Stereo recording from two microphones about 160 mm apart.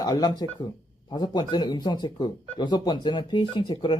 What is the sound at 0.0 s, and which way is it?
Speech, 25° left (ahead or behind).